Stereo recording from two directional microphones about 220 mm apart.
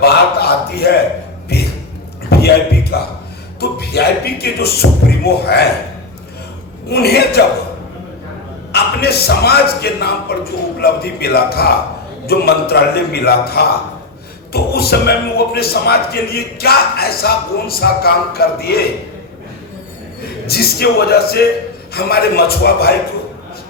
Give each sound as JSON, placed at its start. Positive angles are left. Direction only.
{"t": 0.0, "sound": "a sound", "side_deg": 45}
{"t": 3.6, "sound": "speech", "side_deg": 45}
{"t": 6.9, "sound": "speech", "side_deg": 45}
{"t": 8.7, "sound": "a man's voice", "side_deg": 45}
{"t": 20.5, "sound": "speech", "side_deg": 45}